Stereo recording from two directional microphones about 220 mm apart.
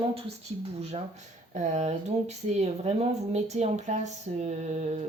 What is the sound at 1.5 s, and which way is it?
Speech, 35° right (ahead or behind).